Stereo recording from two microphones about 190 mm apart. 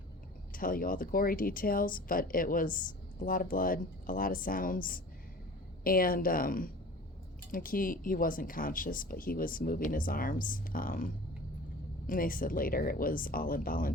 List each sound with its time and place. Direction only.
0.5 s speech: 50° left (ahead or behind)